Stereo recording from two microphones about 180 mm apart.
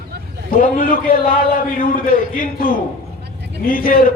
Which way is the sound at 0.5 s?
50° left (ahead or behind).